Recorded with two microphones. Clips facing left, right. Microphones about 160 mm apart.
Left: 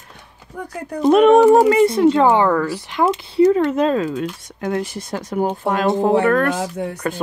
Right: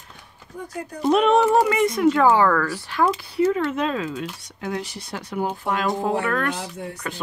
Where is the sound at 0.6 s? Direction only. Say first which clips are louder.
Left 6 dB; 60° left (ahead or behind).